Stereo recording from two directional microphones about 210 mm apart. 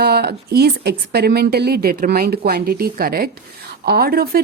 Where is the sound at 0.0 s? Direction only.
50° right (ahead or behind).